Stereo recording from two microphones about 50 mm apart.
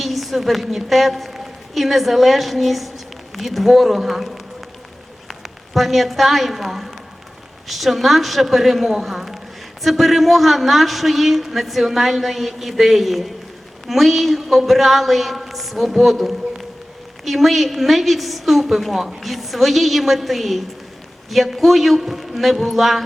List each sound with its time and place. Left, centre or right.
0.0 s a woman's voice: centre